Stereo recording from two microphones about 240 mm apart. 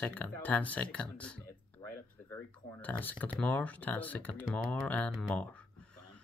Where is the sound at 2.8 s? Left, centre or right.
Centre.